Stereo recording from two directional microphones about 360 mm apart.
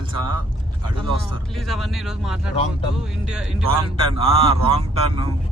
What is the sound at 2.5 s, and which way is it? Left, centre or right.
Speech, centre.